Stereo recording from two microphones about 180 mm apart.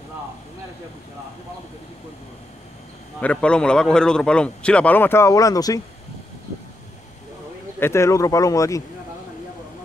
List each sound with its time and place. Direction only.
3.2 s a man's voice: 5° left (ahead or behind)
7.8 s speech: 15° left (ahead or behind)